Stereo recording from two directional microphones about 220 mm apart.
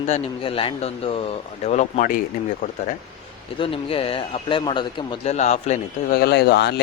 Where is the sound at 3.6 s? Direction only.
25° left (ahead or behind).